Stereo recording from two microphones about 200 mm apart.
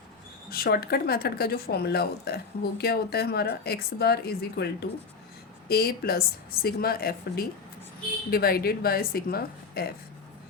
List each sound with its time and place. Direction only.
0.5 s speech: 50° left (ahead or behind)